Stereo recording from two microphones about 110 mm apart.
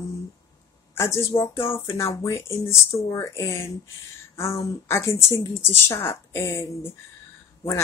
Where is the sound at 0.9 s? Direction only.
25° left (ahead or behind).